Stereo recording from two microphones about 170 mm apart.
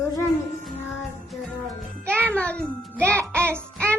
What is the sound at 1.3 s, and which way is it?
Music, centre (ahead or behind).